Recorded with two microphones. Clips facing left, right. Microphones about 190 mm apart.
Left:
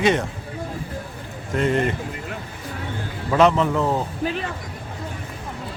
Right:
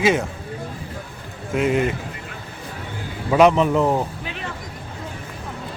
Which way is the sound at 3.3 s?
15° right (ahead or behind).